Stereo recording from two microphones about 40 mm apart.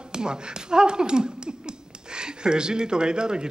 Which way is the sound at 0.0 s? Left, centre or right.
Right.